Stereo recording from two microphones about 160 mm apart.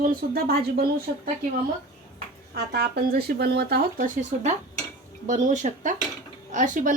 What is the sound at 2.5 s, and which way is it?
Speech, 85° right.